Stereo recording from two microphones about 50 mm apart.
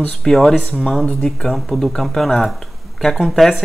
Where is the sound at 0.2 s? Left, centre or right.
Centre.